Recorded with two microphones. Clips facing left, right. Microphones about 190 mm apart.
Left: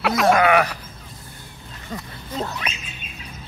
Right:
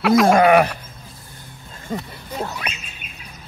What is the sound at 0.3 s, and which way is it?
Speech, 30° right (ahead or behind).